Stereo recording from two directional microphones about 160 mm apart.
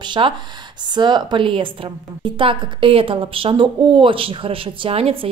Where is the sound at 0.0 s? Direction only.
30° right (ahead or behind).